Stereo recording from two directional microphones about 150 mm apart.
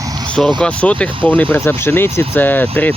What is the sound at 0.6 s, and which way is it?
Speech, 10° left (ahead or behind).